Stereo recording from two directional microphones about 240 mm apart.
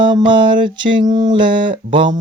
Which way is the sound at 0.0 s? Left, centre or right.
Centre.